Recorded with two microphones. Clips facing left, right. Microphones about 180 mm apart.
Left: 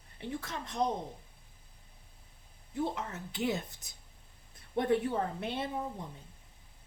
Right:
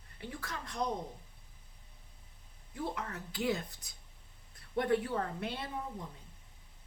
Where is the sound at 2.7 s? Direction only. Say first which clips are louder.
Left 4 dB; 25° left (ahead or behind).